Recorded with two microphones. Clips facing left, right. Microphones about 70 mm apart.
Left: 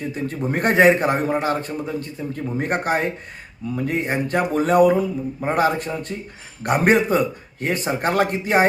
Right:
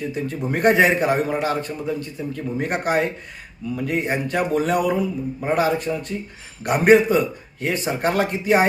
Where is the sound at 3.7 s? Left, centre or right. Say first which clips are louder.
Even; left.